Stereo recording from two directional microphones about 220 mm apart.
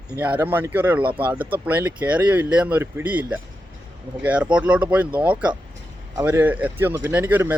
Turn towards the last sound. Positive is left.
turn(degrees=-10)  # may be behind; listen again after turning